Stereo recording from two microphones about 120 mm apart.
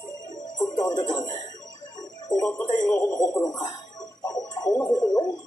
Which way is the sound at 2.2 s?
30° left (ahead or behind).